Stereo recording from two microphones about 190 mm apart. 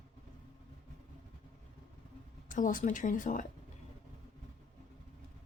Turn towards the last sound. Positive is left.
turn(degrees=45)  # may be behind; listen again after turning